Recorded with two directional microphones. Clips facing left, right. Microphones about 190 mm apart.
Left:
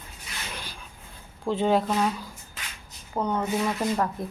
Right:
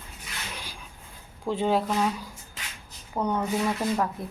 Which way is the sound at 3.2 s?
10° left (ahead or behind).